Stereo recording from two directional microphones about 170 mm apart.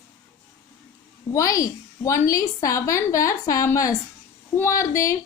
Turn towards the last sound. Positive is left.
turn(degrees=15)  # may be behind; listen again after turning